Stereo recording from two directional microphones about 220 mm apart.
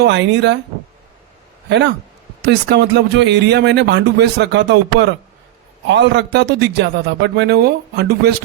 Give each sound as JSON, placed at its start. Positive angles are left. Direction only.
{"t": 0.0, "sound": "speech", "side_deg": -55}
{"t": 2.4, "sound": "speech", "side_deg": -50}